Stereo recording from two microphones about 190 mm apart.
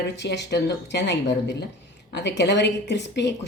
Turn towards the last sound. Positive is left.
turn(degrees=65)  # may be behind; listen again after turning